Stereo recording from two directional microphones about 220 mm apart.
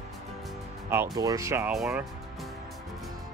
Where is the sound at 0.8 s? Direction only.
10° right (ahead or behind).